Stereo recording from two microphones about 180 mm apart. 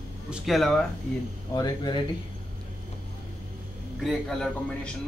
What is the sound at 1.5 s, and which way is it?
Speech, 25° left (ahead or behind).